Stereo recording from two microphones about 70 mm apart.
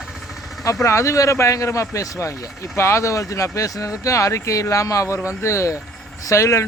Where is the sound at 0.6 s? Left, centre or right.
Left.